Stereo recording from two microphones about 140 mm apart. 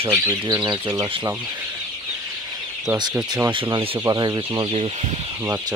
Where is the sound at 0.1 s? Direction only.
25° right (ahead or behind).